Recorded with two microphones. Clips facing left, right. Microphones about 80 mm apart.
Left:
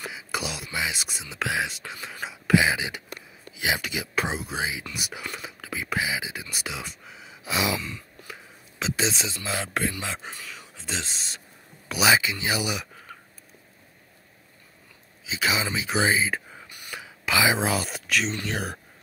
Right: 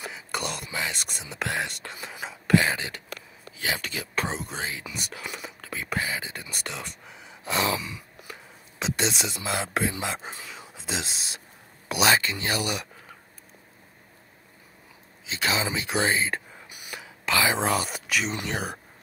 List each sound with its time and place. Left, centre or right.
0.1 s whispering: centre
2.2 s speech: centre
10.2 s speech: right
10.7 s speech: centre
11.9 s speech: centre
15.2 s speech: centre
16.6 s a sound: centre
17.3 s speech: centre